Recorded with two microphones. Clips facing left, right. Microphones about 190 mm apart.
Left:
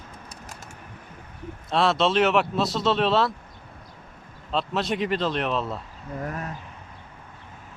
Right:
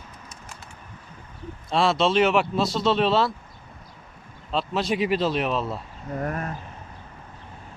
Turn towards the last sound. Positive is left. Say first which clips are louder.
# right 3 dB
turn(degrees=-50)  # may be behind; listen again after turning